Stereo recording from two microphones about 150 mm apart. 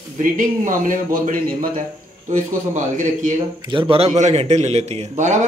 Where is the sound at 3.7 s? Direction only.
35° right (ahead or behind).